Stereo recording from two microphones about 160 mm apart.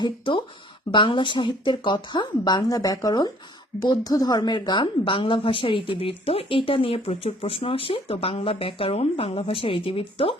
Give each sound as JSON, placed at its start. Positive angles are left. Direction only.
{"t": 0.3, "sound": "a woman's voice", "side_deg": 30}